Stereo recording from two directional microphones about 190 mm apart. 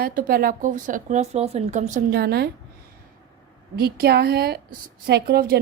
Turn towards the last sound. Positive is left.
turn(degrees=-55)  # may be behind; listen again after turning